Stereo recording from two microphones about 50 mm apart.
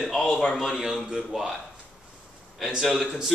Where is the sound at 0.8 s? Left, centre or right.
Centre.